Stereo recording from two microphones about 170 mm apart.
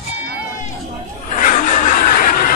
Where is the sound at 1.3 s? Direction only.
50° left (ahead or behind).